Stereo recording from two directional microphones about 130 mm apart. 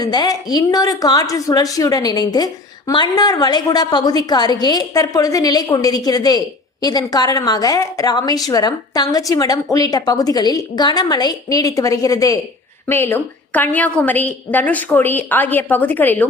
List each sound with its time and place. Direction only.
0.0 s a woman's voice: 30° left (ahead or behind); by 16.2 s 15° left (ahead or behind)